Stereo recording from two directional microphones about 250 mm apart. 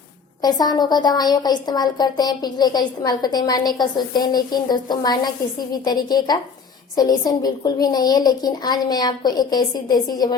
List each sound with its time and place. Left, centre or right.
0.4 s a woman's voice: centre